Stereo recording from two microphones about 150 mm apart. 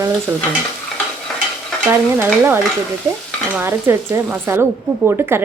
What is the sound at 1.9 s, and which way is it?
Speech, 15° right (ahead or behind).